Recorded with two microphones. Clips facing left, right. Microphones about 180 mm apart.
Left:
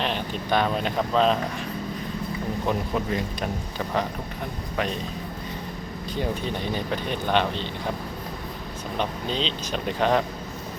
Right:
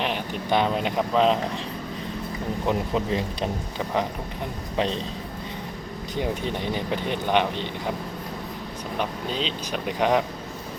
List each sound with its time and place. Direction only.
0.0 s speech: 15° right (ahead or behind)
2.6 s speech: 20° right (ahead or behind)
6.1 s speech: 20° right (ahead or behind)
9.0 s speech: 10° right (ahead or behind)